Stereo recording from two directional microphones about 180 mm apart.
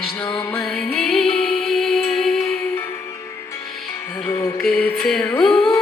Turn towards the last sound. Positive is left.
turn(degrees=5)  # may be behind; listen again after turning